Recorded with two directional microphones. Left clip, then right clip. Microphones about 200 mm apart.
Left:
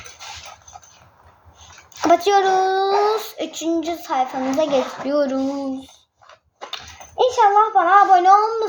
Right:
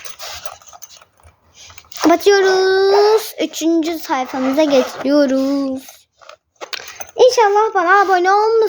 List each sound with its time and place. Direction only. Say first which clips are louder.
2.0 s a child's voice: right 3 dB; 50° right (ahead or behind)
7.2 s a child's voice: right 3 dB; 55° right (ahead or behind)